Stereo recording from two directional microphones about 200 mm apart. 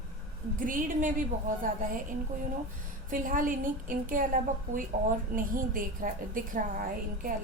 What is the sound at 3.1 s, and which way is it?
A woman's voice, 45° right (ahead or behind).